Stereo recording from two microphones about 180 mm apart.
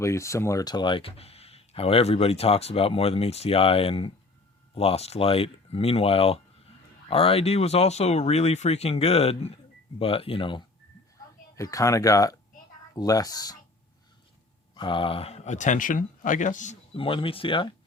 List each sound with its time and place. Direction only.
0.0 s speech: 15° left (ahead or behind)
11.5 s speech: 20° left (ahead or behind)
14.8 s speech: 30° left (ahead or behind)
16.9 s speech: 30° left (ahead or behind)